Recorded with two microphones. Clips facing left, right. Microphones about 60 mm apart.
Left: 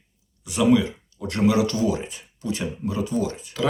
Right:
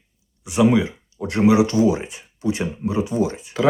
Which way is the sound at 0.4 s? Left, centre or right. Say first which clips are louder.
Right 2 dB; right.